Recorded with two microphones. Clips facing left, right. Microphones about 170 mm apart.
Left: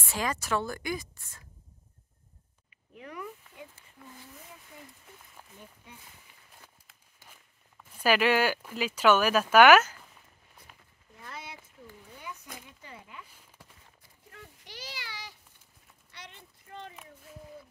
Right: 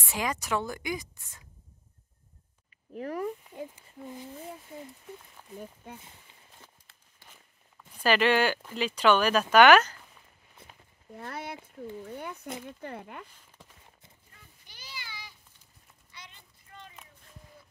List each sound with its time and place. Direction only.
0.0 s a woman's voice: 15° right (ahead or behind)
2.9 s speech: 40° right (ahead or behind)
3.7 s a child's voice: 20° right (ahead or behind)
7.2 s walk: 10° left (ahead or behind)
7.7 s speech: 10° left (ahead or behind)
10.6 s a sound: 25° right (ahead or behind)
11.1 s speech: 60° right (ahead or behind)
14.3 s a sound: 80° left
16.1 s child singing: 70° left (ahead or behind)